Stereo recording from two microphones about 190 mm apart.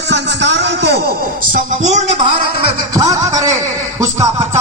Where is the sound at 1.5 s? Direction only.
40° right (ahead or behind).